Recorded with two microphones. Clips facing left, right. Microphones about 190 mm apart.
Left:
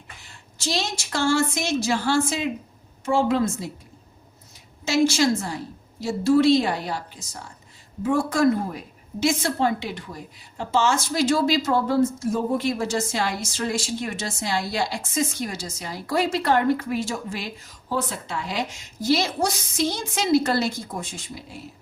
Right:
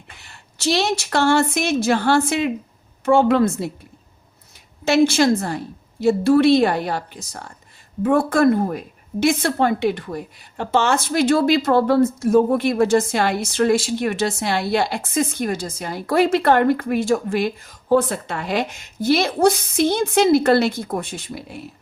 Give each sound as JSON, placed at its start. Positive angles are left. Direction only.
{"t": 0.2, "sound": "a woman's voice", "side_deg": -65}
{"t": 4.9, "sound": "a woman's voice", "side_deg": -55}